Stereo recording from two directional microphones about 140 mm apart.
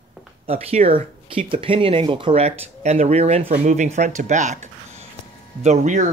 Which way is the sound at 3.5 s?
60° right (ahead or behind).